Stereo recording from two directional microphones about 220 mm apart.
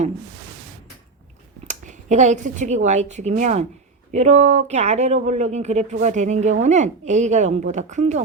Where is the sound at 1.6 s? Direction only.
35° right (ahead or behind).